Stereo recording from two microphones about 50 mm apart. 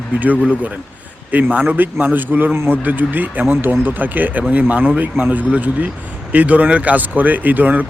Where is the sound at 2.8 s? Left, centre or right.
Right.